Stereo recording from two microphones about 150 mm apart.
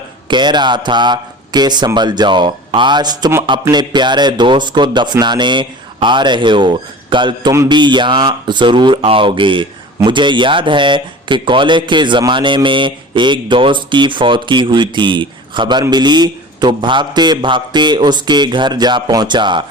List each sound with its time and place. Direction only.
0.3 s speech: 30° right (ahead or behind)